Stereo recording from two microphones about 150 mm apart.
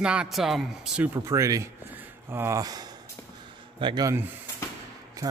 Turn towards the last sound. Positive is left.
turn(degrees=-30)  # may be behind; listen again after turning